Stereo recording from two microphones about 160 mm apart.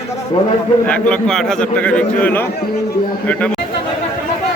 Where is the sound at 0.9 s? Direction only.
5° left (ahead or behind).